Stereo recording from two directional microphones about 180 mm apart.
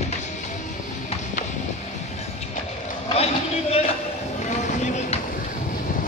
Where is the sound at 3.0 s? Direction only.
35° left (ahead or behind).